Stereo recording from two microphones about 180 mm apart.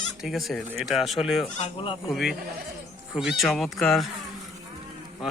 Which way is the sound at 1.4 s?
30° left (ahead or behind).